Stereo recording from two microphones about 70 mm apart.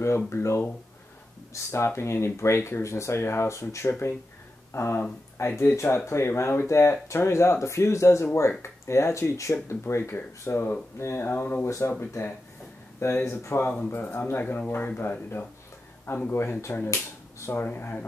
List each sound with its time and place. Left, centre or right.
0.3 s speech: left
13.7 s speech: left